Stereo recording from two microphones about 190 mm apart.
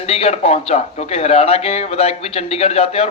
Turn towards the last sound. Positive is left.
turn(degrees=35)  # may be behind; listen again after turning